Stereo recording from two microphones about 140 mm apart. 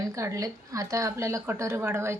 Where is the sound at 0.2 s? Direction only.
25° right (ahead or behind).